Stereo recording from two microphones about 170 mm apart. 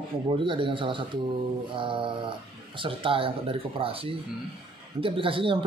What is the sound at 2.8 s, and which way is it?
A man's voice, 30° right (ahead or behind).